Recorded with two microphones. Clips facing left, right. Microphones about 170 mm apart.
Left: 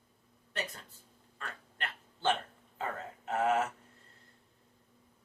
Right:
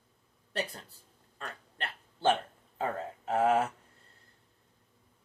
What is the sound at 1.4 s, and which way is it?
Dog, 35° right (ahead or behind).